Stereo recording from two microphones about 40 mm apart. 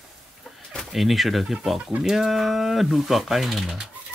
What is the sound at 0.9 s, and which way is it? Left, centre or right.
Speech, centre.